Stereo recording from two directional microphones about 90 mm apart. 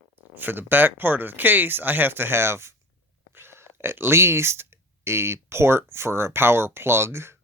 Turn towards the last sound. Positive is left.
turn(degrees=-30)  # may be behind; listen again after turning